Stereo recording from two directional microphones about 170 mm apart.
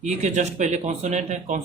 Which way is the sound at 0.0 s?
45° right (ahead or behind).